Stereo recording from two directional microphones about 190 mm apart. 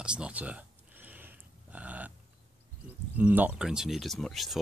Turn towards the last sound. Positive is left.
turn(degrees=0)  # may be behind; listen again after turning